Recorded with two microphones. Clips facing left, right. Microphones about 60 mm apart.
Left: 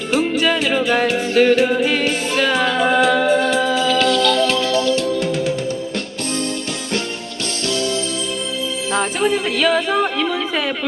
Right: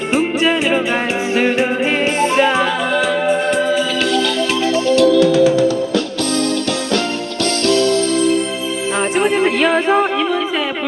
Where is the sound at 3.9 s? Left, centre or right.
Centre.